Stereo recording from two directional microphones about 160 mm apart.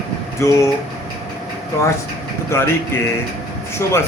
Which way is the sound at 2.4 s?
15° left (ahead or behind).